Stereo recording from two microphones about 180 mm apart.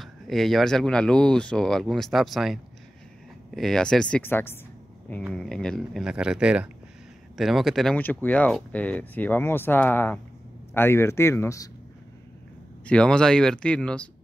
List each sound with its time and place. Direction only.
0.0 s speech: centre (ahead or behind); by 11.7 s 15° left (ahead or behind)
12.8 s speech: 5° left (ahead or behind)